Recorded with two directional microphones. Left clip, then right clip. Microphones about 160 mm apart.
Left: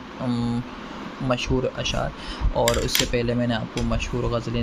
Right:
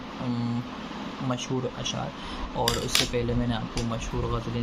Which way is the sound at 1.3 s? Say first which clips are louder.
Left 8 dB; 25° left (ahead or behind).